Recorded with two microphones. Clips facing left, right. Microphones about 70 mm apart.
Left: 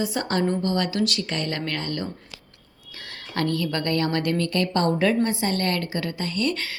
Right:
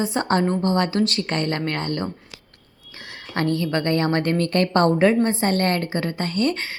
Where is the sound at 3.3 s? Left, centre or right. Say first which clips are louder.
Right 3 dB; right.